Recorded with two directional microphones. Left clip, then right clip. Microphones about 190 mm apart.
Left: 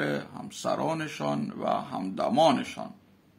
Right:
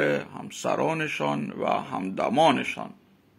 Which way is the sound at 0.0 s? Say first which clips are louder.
Right 6 dB; 20° right (ahead or behind).